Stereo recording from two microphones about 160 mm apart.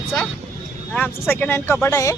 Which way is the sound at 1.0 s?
15° left (ahead or behind).